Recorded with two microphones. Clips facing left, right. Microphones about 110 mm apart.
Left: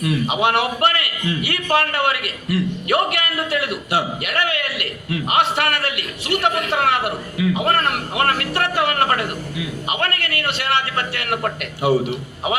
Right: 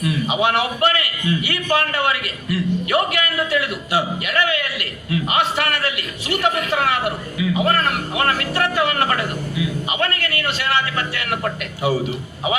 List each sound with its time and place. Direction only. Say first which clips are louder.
0.0 s a man's voice: even; 60° left (ahead or behind)